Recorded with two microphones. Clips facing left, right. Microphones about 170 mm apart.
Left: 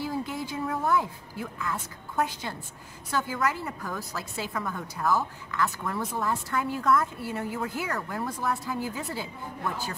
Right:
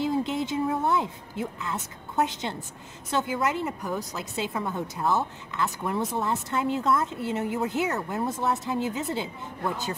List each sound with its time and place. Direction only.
0.0 s a woman's voice: 20° right (ahead or behind)